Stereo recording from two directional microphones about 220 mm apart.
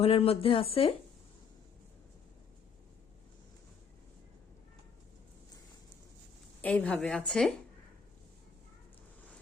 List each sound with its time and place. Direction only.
0.0 s speech: 25° left (ahead or behind)
6.6 s a woman's voice: 5° left (ahead or behind)